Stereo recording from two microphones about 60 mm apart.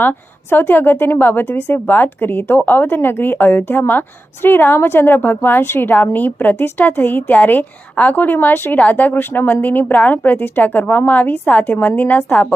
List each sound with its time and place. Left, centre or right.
0.0 s a woman's voice: left